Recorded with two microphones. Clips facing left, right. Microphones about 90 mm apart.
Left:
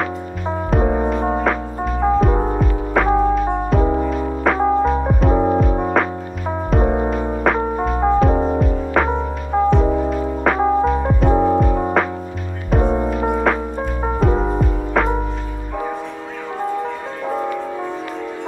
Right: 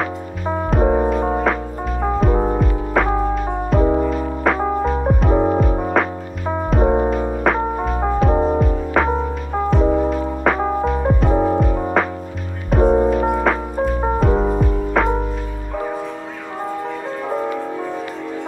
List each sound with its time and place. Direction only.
0.7 s music: centre (ahead or behind)
5.7 s music: 20° left (ahead or behind)
5.9 s music: centre (ahead or behind)